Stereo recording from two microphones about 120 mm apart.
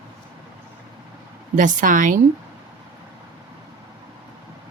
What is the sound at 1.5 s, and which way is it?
Speech, 90° right.